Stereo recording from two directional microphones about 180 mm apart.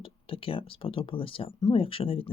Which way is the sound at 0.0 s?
30° left (ahead or behind).